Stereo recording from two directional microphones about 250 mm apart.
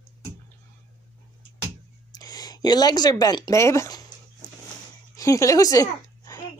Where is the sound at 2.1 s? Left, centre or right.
Centre.